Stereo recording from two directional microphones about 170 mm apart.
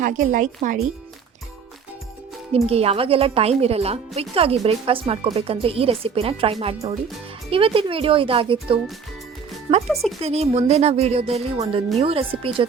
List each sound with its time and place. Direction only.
0.0 s speech: 50° right (ahead or behind)
2.5 s speech: 35° right (ahead or behind)
9.8 s speech: centre (ahead or behind)
10.2 s speech: 35° right (ahead or behind)